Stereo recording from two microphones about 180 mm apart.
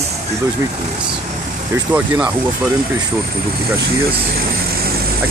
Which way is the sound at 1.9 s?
10° right (ahead or behind).